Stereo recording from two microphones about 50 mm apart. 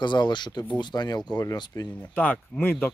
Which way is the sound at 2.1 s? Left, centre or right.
Left.